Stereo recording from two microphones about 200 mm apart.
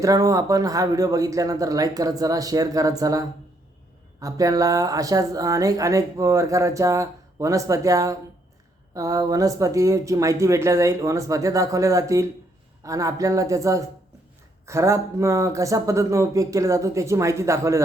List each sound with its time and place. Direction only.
0.0 s speech: 15° right (ahead or behind)